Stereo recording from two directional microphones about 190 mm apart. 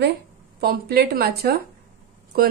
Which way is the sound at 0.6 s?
55° right (ahead or behind).